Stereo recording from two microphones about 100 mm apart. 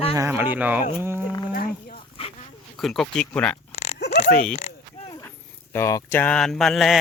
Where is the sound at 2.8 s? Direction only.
5° left (ahead or behind).